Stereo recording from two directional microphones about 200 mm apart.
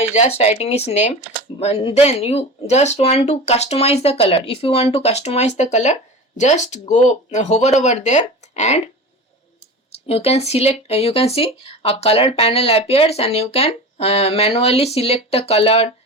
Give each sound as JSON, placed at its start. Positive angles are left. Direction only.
{"t": 0.0, "sound": "speech", "side_deg": 35}
{"t": 9.9, "sound": "speech", "side_deg": 30}